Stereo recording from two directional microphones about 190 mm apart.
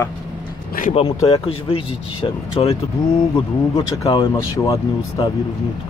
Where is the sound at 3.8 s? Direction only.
25° left (ahead or behind).